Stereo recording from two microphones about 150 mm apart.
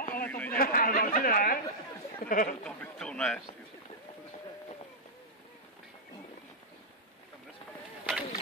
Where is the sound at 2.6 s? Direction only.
5° left (ahead or behind).